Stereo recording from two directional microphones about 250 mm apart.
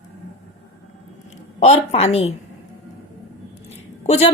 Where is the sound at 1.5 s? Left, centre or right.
Left.